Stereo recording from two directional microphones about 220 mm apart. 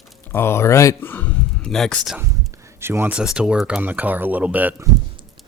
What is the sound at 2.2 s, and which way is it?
Speech, 15° right (ahead or behind).